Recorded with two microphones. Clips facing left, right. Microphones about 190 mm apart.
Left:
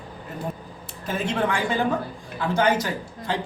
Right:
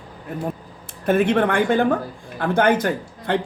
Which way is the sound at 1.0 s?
60° right (ahead or behind).